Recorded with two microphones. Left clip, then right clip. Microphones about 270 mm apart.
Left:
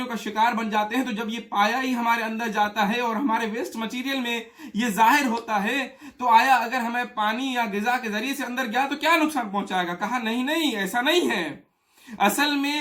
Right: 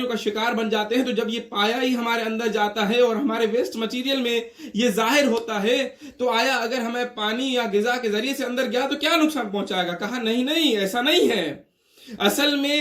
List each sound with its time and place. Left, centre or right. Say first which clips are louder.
0.1 s speech: left 6 dB; centre
12.2 s speech: right 1 dB; centre